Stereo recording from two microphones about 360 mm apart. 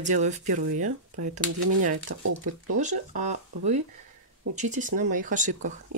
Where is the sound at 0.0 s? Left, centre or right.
Centre.